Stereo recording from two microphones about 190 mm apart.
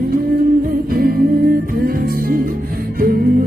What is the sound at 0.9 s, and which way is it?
Music, 50° right (ahead or behind).